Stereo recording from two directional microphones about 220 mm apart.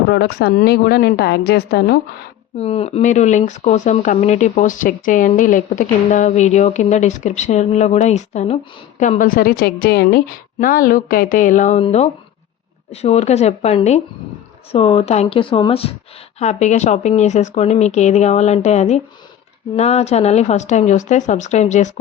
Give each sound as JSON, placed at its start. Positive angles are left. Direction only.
{"t": 0.1, "sound": "a woman's voice", "side_deg": 45}
{"t": 2.6, "sound": "speech", "side_deg": 25}